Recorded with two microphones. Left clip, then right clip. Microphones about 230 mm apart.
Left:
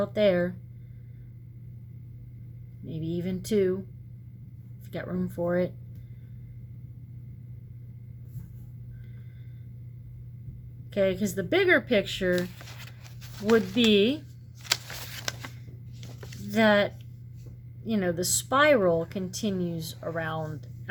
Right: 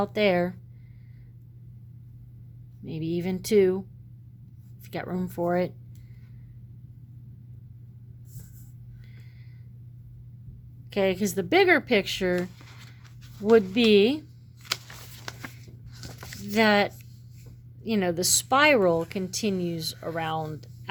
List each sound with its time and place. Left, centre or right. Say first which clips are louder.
0.0 s a woman's voice: even; right
2.8 s a woman's voice: right 3 dB; right
4.9 s a woman's voice: right 2 dB; right
10.9 s a woman's voice: right 1 dB; right
13.5 s a woman's voice: right 3 dB; right
15.3 s a sound: left 5 dB; left
16.5 s a woman's voice: right 1 dB; right